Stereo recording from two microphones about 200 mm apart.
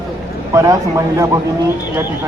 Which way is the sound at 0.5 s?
15° right (ahead or behind).